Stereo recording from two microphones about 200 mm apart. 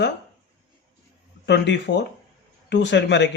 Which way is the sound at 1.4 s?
60° left (ahead or behind).